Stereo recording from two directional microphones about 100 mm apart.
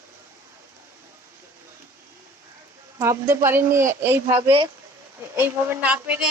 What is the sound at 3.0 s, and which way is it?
A woman's voice, 25° right (ahead or behind).